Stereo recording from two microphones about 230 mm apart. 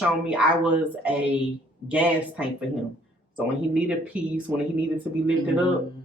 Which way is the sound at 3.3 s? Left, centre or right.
Centre.